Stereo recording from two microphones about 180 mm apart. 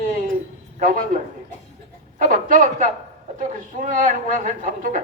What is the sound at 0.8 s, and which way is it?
A man's voice, 50° right (ahead or behind).